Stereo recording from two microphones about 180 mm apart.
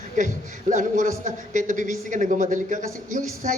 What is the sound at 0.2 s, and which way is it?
A woman's voice, 45° right (ahead or behind).